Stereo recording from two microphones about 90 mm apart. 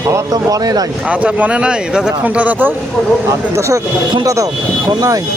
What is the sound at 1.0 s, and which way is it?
Speech, 15° right (ahead or behind).